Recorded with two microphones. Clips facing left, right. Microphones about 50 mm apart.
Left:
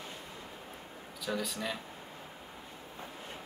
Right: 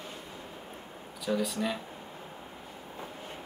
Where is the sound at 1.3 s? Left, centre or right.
Centre.